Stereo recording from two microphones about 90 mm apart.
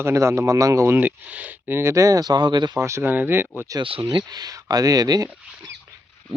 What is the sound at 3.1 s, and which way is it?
Speech, 25° right (ahead or behind).